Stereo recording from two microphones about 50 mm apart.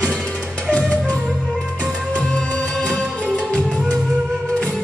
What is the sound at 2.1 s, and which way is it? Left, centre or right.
Music, centre.